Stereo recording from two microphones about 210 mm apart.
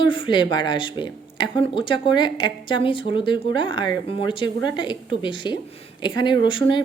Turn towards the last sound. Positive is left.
turn(degrees=25)  # may be behind; listen again after turning